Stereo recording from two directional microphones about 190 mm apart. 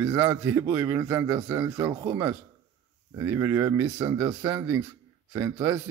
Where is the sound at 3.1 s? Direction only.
15° right (ahead or behind).